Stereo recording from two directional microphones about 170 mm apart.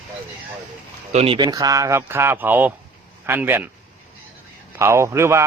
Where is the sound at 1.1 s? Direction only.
35° right (ahead or behind); by 3.7 s 15° right (ahead or behind).